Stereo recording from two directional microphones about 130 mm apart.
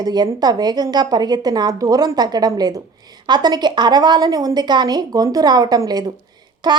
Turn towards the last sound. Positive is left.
turn(degrees=-30)  # may be behind; listen again after turning